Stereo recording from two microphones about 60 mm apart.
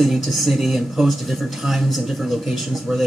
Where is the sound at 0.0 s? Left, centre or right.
Centre.